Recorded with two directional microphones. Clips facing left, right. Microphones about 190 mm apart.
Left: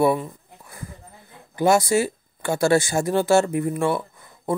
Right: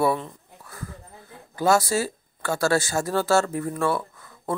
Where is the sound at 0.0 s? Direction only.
15° left (ahead or behind).